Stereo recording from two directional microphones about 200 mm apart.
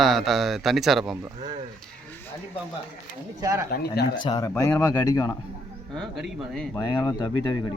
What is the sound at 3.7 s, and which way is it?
Speech, 50° left (ahead or behind).